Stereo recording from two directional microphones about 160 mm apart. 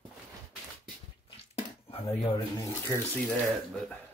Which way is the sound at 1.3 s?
35° left (ahead or behind).